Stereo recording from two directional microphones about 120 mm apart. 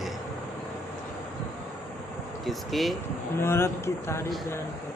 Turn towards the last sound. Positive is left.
turn(degrees=20)  # may be behind; listen again after turning